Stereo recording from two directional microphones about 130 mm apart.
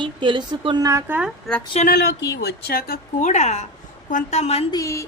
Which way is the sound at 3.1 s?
65° left (ahead or behind).